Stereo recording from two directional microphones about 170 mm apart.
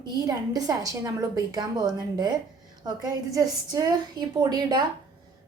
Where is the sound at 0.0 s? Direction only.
25° right (ahead or behind).